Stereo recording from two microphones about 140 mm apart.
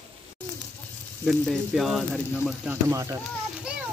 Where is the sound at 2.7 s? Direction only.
20° right (ahead or behind).